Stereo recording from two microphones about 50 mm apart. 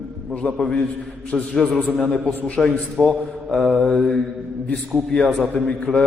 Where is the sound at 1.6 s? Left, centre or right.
Centre.